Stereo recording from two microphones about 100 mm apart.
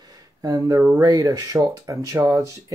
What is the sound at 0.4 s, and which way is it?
Speech, 35° right (ahead or behind).